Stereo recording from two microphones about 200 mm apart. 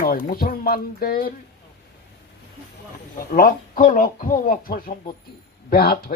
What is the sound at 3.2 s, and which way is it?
A man's voice, 45° left (ahead or behind).